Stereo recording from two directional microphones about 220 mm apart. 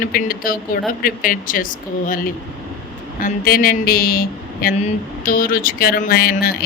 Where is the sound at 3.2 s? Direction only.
40° left (ahead or behind).